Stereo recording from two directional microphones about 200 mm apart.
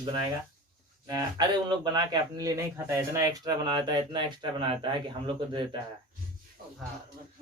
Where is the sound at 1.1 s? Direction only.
20° right (ahead or behind).